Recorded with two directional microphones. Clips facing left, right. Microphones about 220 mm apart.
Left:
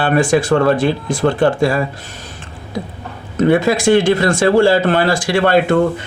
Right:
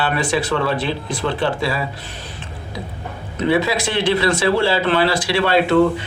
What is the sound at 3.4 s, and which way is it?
Speech, 50° left (ahead or behind).